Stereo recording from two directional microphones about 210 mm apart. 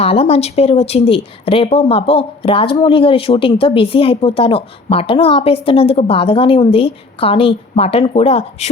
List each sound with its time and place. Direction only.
0.0 s speech: 30° left (ahead or behind)